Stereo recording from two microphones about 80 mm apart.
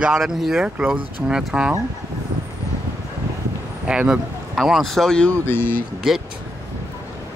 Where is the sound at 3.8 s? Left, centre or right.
Centre.